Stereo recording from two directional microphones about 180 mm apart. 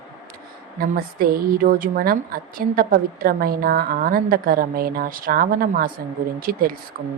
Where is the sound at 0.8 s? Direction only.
55° right (ahead or behind).